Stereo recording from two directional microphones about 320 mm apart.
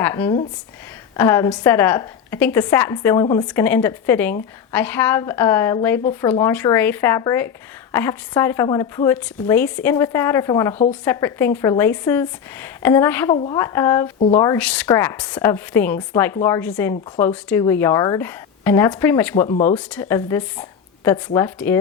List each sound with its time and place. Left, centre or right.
0.0 s a woman's voice: centre
19.5 s speech: centre
19.7 s a woman's voice: centre